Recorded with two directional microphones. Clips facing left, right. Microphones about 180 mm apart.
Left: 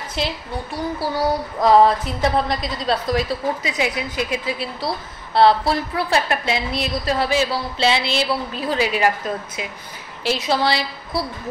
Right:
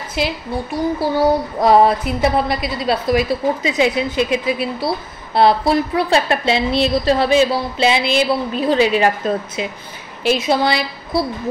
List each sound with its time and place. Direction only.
0.1 s speech: 5° right (ahead or behind)
0.9 s a woman's voice: 20° right (ahead or behind)